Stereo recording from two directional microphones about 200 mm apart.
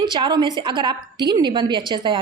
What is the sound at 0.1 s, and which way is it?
A woman's voice, 25° right (ahead or behind).